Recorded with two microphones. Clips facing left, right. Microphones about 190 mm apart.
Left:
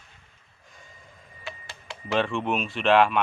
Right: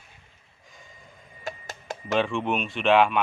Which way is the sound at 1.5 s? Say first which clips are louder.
Right 6 dB; 45° right (ahead or behind).